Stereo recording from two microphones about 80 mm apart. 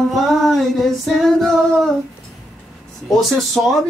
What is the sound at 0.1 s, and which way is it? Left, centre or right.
Female singing, centre.